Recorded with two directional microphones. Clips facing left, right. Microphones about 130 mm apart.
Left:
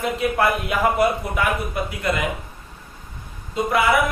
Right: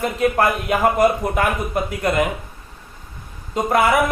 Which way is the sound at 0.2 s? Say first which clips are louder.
Right 4 dB; 45° right (ahead or behind).